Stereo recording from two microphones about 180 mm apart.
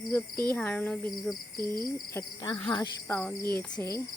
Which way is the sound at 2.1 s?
20° left (ahead or behind).